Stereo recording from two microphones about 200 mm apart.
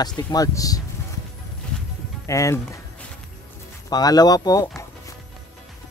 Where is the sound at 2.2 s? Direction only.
15° left (ahead or behind).